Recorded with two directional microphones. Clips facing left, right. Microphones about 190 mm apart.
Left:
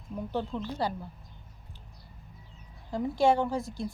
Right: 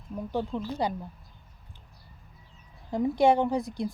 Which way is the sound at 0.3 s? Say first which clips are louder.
Right 3 dB; 15° right (ahead or behind).